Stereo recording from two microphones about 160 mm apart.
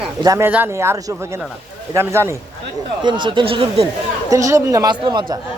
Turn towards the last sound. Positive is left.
turn(degrees=-25)  # may be behind; listen again after turning